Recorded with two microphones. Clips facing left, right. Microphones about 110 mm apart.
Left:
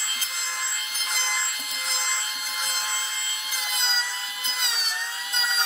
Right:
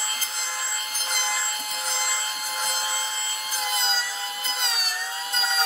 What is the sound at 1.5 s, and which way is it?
Sawing, 40° right (ahead or behind).